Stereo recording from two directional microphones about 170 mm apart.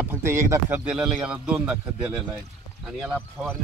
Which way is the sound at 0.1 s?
15° right (ahead or behind).